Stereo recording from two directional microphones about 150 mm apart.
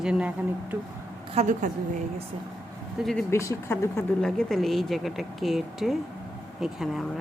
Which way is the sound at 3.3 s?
20° left (ahead or behind).